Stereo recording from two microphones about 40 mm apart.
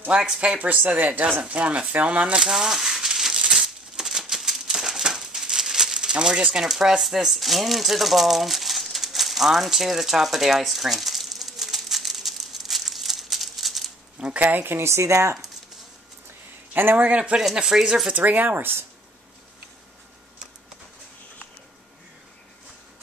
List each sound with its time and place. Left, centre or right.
0.1 s speech: centre
0.6 s speech: right
2.6 s crumpling: centre
5.9 s speech: right
6.6 s a sound: centre
14.4 s speech: right
16.7 s speech: right
17.3 s speech: right
17.7 s speech: centre
18.1 s speech: right